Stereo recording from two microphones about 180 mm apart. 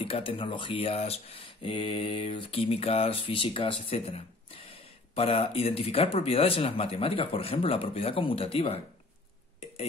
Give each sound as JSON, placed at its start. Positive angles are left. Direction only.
{"t": 0.0, "sound": "speech", "side_deg": 30}